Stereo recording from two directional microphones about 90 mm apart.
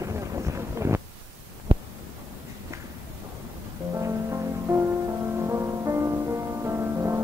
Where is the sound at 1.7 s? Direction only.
90° right.